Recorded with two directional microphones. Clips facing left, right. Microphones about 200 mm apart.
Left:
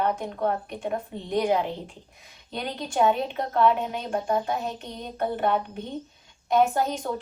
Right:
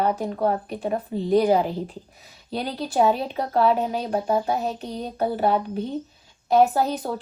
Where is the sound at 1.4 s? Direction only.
35° right (ahead or behind).